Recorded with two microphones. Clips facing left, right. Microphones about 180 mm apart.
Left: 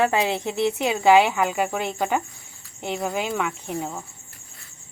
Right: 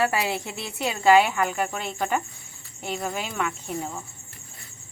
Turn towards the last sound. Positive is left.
turn(degrees=10)  # may be behind; listen again after turning